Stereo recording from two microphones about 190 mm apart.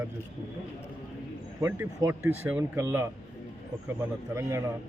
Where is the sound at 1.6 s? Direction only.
15° right (ahead or behind).